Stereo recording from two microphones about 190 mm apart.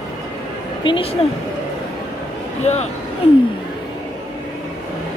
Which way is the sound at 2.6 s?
35° left (ahead or behind).